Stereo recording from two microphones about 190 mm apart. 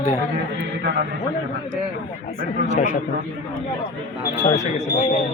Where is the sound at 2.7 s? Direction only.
45° left (ahead or behind).